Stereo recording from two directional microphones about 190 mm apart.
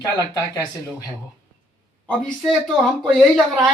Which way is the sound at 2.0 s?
5° left (ahead or behind).